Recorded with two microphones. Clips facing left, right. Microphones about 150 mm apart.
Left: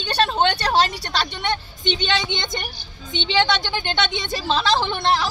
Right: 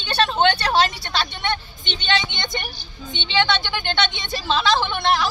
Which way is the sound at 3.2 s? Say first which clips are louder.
Left 1 dB; 40° left (ahead or behind).